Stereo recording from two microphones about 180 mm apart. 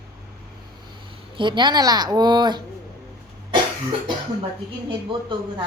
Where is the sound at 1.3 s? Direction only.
25° right (ahead or behind).